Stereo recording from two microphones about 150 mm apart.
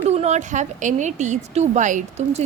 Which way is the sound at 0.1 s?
45° right (ahead or behind).